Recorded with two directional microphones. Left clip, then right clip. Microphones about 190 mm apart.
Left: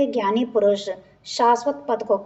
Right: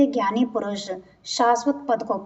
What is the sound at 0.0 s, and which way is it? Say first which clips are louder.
A woman's voice: even; 35° left (ahead or behind).